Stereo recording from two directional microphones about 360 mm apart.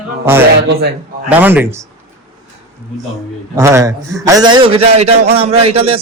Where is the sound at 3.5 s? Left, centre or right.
Centre.